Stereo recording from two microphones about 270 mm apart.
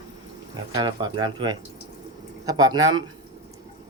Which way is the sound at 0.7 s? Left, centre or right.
Centre.